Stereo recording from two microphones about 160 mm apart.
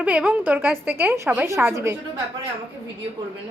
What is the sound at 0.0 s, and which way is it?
A woman's voice, 10° right (ahead or behind).